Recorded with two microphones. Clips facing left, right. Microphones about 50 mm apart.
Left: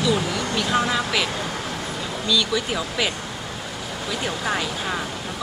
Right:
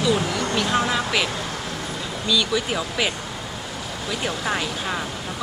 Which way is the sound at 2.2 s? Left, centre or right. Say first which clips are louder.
Even; centre.